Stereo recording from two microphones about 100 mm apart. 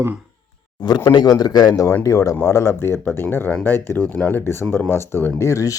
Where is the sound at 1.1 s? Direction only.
40° left (ahead or behind).